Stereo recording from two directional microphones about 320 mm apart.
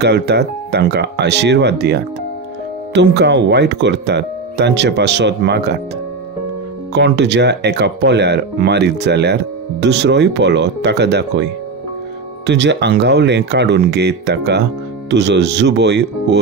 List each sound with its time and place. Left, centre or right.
0.0 s speech: right
6.9 s speech: right